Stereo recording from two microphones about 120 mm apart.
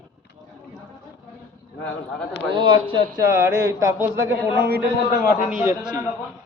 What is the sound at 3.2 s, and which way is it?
Speech, 20° right (ahead or behind).